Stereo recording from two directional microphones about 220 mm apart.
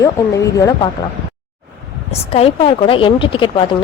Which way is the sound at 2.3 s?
25° left (ahead or behind).